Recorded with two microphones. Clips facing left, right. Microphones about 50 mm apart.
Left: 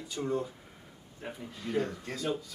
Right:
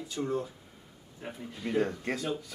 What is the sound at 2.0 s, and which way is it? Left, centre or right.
Speech, right.